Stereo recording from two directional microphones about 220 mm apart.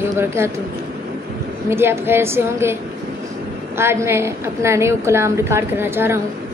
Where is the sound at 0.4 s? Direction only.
10° right (ahead or behind).